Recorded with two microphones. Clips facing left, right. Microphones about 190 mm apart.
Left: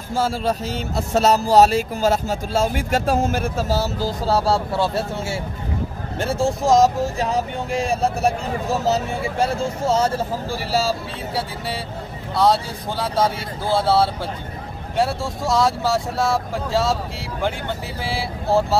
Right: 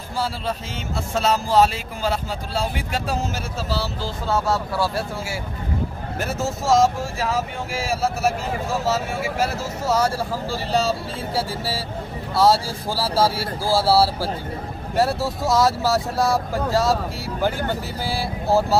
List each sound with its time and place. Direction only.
0.1 s speech: 45° left (ahead or behind)
4.7 s speech: 25° left (ahead or behind)
6.6 s speech: centre (ahead or behind)
7.2 s vehicle: 35° left (ahead or behind)
8.6 s speech: centre (ahead or behind)
9.2 s speech: 30° left (ahead or behind)
10.7 s speech: centre (ahead or behind)
13.7 s speech: 5° right (ahead or behind)